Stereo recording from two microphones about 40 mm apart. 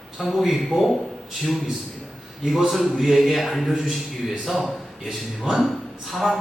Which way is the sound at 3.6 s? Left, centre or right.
Centre.